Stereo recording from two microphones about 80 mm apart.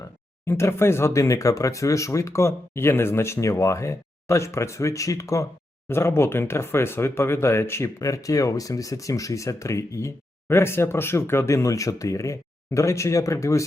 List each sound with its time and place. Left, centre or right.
0.0 s speech: left
5.9 s speech: left